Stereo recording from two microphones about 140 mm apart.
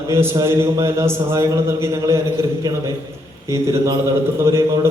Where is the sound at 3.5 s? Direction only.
20° right (ahead or behind).